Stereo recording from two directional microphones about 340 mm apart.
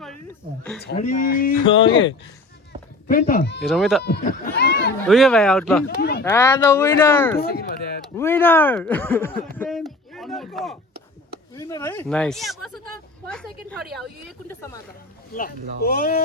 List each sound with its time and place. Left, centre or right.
0.8 s speech: left
3.1 s speech: left
3.6 s speech: centre
4.0 s speech: left
5.0 s speech: centre
6.0 s speech: left
6.2 s speech: centre
10.1 s a sound: centre
11.5 s speech: centre
15.3 s speech: left